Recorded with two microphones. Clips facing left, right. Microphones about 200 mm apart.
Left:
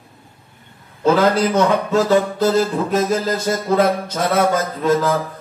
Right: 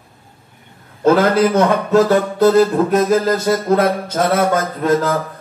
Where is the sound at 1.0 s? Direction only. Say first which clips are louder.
Right 3 dB; 55° right (ahead or behind).